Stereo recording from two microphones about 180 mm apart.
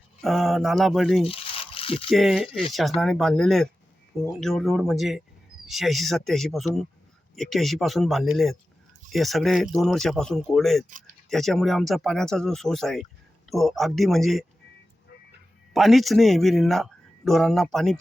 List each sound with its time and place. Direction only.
0.2 s speech: centre (ahead or behind)
1.2 s a sound: 30° left (ahead or behind)
2.0 s speech: centre (ahead or behind)
10.8 s speech: 45° right (ahead or behind)
11.3 s speech: centre (ahead or behind)
15.7 s speech: centre (ahead or behind)